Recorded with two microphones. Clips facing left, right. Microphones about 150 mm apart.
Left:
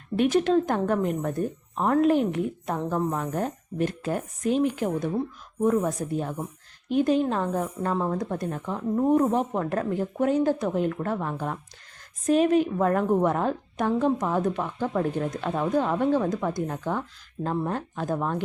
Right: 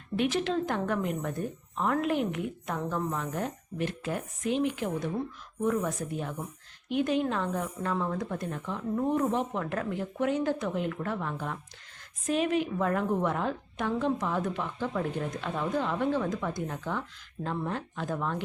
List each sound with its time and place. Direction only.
0.2 s a woman's voice: 45° left (ahead or behind)